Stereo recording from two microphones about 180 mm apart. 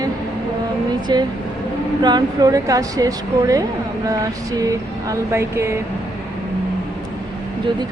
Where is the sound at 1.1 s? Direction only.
25° right (ahead or behind).